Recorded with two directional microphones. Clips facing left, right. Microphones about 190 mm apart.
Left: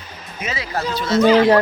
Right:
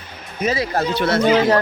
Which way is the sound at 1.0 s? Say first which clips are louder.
Left 2 dB; 60° right (ahead or behind).